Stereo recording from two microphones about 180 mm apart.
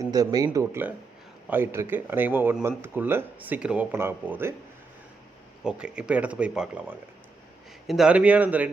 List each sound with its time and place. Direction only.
0.0 s speech: 20° right (ahead or behind)
5.6 s speech: 5° right (ahead or behind)